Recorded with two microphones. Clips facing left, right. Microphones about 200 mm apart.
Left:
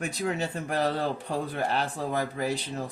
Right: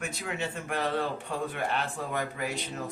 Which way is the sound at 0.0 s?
35° left (ahead or behind).